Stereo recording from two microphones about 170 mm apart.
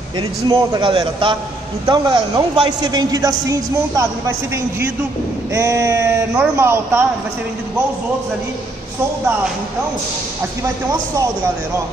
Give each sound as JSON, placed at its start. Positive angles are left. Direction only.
{"t": 0.5, "sound": "a man's voice", "side_deg": -20}